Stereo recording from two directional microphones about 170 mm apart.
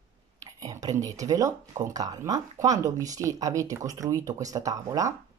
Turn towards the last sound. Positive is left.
turn(degrees=-20)  # may be behind; listen again after turning